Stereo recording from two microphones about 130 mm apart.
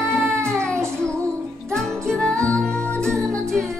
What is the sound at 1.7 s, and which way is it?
Music, 5° left (ahead or behind).